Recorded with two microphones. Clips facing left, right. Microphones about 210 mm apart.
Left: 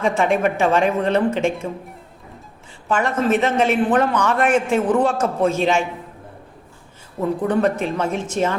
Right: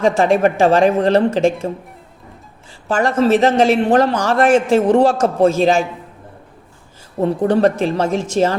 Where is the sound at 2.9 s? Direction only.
30° right (ahead or behind).